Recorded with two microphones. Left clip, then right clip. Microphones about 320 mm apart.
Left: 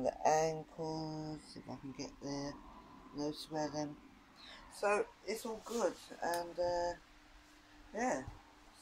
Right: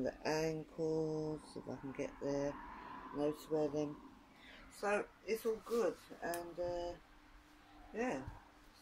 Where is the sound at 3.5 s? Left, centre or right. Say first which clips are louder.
Right 3 dB; right.